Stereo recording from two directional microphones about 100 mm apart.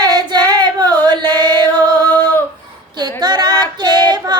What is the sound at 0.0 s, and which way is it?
Child singing, 45° right (ahead or behind).